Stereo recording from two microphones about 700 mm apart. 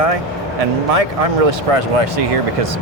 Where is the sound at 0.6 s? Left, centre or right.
Right.